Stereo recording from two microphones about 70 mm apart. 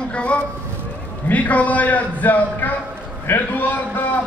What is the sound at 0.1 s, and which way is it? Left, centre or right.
A man's voice, centre.